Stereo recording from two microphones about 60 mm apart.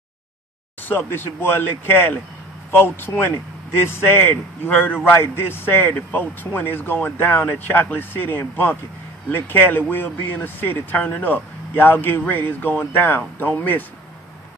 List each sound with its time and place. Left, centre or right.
0.8 s a man's voice: left